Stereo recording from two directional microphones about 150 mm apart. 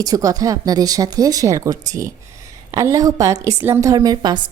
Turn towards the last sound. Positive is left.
turn(degrees=-30)  # may be behind; listen again after turning